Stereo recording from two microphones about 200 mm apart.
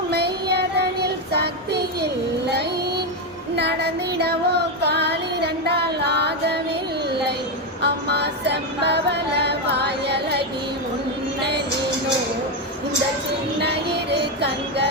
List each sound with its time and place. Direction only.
0.1 s child singing: 55° right (ahead or behind)
3.5 s female singing: 55° right (ahead or behind)
7.8 s music: 55° right (ahead or behind)
13.6 s music: 55° right (ahead or behind)